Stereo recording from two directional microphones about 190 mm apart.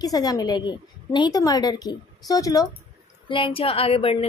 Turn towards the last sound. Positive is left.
turn(degrees=30)  # may be behind; listen again after turning